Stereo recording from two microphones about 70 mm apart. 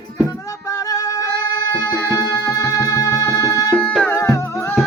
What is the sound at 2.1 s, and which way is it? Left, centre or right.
Music, left.